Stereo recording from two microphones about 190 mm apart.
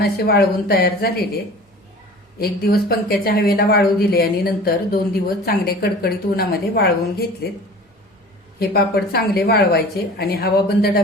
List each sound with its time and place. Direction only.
0.0 s speech: 55° left (ahead or behind)
2.4 s a woman's voice: 55° left (ahead or behind)
8.5 s speech: 55° left (ahead or behind)